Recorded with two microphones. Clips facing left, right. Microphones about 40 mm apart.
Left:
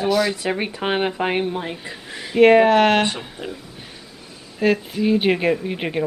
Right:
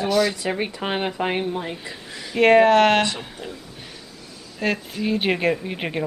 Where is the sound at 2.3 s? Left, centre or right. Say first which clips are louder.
Left 2 dB; centre.